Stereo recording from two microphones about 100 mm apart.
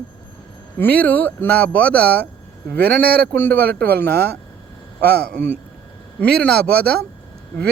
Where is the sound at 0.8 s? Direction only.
15° left (ahead or behind).